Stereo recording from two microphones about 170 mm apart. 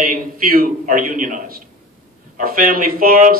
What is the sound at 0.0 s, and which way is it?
A man's voice, 55° right (ahead or behind).